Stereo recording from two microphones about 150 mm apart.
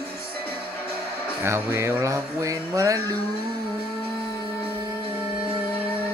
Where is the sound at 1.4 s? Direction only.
15° right (ahead or behind).